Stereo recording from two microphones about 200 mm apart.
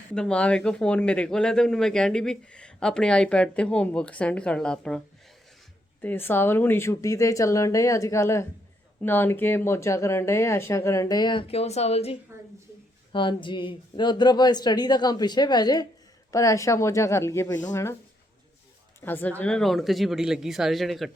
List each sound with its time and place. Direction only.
0.1 s speech: 5° left (ahead or behind); by 12.1 s 30° left (ahead or behind)
13.1 s speech: 25° left (ahead or behind)
19.0 s speech: 10° left (ahead or behind)